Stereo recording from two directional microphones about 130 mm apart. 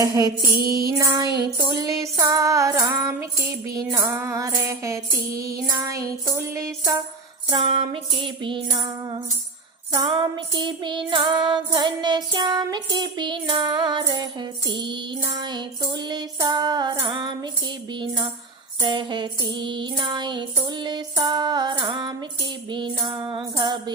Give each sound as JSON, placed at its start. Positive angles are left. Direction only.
{"t": 0.0, "sound": "music", "side_deg": -25}
{"t": 7.5, "sound": "music", "side_deg": -40}